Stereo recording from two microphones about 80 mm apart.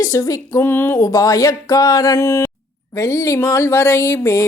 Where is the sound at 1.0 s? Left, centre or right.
Left.